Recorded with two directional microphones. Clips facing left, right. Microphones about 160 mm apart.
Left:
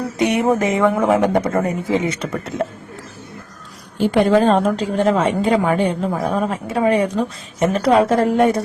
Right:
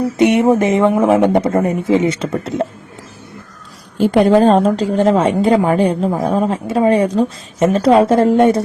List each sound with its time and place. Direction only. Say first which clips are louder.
0.2 s a man's voice: right 5 dB; 25° right (ahead or behind)
3.9 s a woman's voice: right 3 dB; 40° right (ahead or behind); by 8.6 s 25° right (ahead or behind)